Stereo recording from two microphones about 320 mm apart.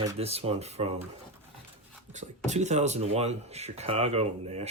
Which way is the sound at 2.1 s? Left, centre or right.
Right.